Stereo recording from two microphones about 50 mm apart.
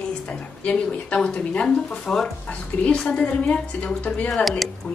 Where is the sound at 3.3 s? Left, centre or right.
Left.